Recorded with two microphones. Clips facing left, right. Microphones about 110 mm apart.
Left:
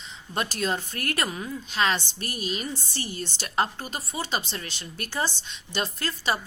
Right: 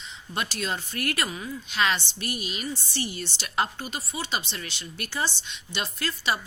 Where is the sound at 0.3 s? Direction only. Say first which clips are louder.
Left 3 dB; 45° left (ahead or behind).